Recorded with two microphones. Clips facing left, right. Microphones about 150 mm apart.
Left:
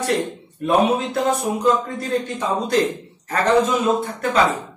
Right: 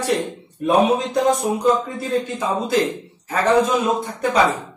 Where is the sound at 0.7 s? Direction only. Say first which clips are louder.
Right 1 dB; 15° right (ahead or behind).